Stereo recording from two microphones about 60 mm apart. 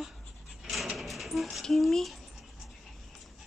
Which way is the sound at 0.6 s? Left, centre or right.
Centre.